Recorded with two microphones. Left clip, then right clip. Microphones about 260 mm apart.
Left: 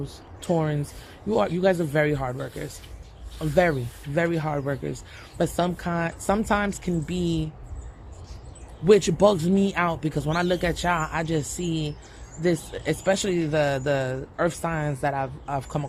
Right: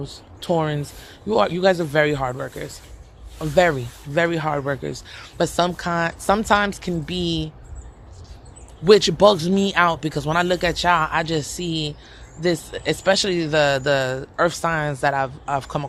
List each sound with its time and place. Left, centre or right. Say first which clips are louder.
0.0 s speech: right 3 dB; centre
8.8 s speech: right 4 dB; right